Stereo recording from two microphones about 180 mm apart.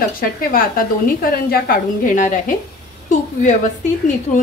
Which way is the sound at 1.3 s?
55° left (ahead or behind).